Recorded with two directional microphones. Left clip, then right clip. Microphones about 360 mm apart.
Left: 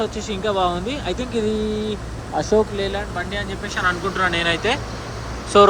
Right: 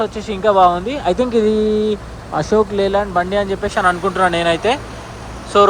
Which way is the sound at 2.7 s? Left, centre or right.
Centre.